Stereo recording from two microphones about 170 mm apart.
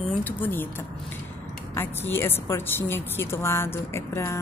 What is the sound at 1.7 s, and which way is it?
A woman's voice, 15° left (ahead or behind).